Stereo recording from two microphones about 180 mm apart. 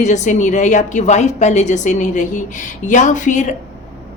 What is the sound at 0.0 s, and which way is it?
A woman's voice, 40° left (ahead or behind).